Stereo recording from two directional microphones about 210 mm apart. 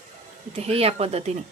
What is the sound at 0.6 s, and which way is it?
Speech, 30° right (ahead or behind).